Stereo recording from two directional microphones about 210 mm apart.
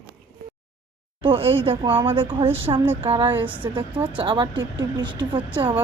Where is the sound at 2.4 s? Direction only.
10° right (ahead or behind).